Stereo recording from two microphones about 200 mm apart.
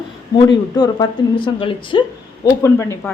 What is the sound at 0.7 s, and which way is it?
Speech, 20° left (ahead or behind).